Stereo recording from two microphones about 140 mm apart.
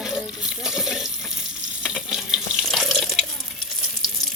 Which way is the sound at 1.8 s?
5° right (ahead or behind).